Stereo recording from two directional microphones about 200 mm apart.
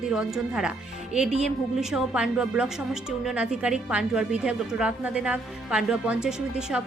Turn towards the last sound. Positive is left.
turn(degrees=-5)  # may be behind; listen again after turning